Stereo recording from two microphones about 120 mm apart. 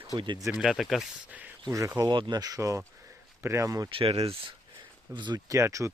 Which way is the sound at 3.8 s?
50° right (ahead or behind).